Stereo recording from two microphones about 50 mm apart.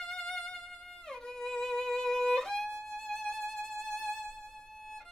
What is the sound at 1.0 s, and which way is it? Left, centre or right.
Violin, centre.